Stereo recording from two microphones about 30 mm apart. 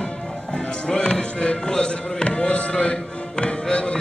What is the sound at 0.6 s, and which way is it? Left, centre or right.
Music, left.